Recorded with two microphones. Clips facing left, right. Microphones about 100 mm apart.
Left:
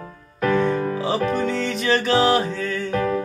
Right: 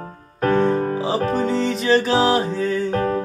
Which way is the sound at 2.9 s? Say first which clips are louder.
Right 1 dB; 40° right (ahead or behind).